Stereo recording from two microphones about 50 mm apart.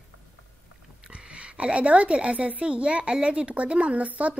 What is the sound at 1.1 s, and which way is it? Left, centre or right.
A woman's voice, right.